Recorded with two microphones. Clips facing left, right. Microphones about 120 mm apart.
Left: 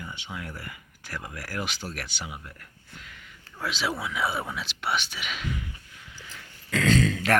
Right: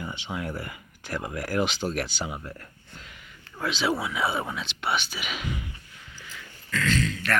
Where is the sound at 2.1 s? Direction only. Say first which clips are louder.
Right 6 dB; 35° right (ahead or behind).